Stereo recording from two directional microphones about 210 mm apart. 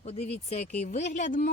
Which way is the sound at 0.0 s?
30° left (ahead or behind).